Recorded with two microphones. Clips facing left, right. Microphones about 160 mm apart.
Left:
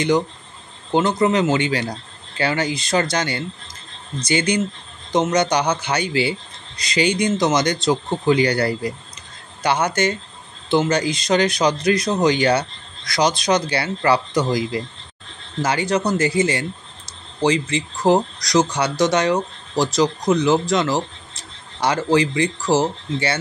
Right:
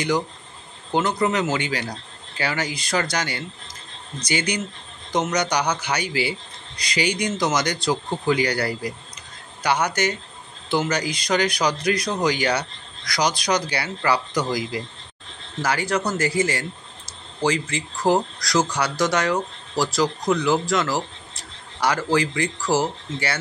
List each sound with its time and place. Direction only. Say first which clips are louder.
0.9 s speech: left 4 dB; 25° left (ahead or behind)